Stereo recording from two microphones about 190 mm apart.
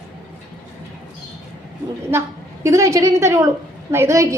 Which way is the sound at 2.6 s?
15° right (ahead or behind).